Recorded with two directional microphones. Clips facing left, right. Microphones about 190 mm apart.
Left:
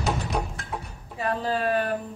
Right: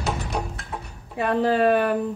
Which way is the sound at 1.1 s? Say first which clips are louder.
Right 6 dB; 65° right (ahead or behind).